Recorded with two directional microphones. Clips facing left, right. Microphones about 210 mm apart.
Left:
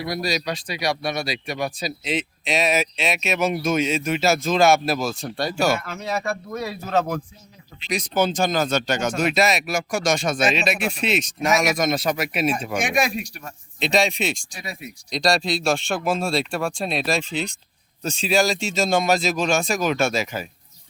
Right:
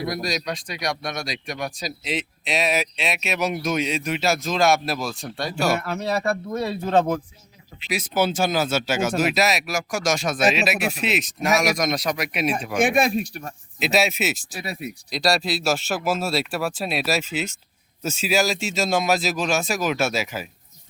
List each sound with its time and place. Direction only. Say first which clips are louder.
0.0 s speech: left 1 dB; centre (ahead or behind)
5.9 s speech: right 3 dB; 35° right (ahead or behind)
7.9 s speech: left 1 dB; 5° right (ahead or behind)